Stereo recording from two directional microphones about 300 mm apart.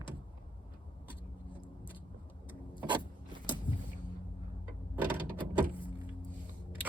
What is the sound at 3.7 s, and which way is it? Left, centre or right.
Vehicle, centre.